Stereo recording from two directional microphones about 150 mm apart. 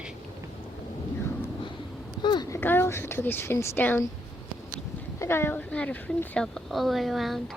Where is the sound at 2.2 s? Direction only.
30° left (ahead or behind).